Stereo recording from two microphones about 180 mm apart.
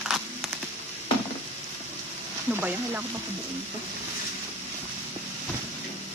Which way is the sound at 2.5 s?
10° right (ahead or behind).